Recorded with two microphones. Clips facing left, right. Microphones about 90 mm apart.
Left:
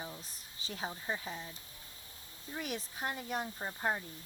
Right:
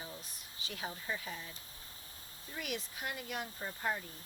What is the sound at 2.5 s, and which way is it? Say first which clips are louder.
Speech: left 2 dB; 35° left (ahead or behind).